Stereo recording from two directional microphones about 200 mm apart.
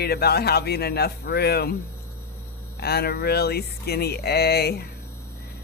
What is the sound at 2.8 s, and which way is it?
Speech, 50° left (ahead or behind).